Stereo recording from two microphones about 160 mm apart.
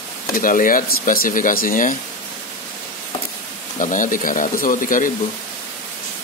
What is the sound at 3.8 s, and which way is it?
Speech, 55° left (ahead or behind).